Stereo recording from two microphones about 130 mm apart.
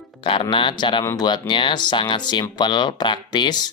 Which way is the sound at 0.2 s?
40° left (ahead or behind).